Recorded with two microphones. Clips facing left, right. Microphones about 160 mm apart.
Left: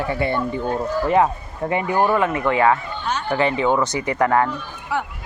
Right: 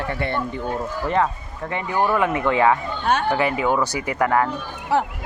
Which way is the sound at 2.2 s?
15° right (ahead or behind).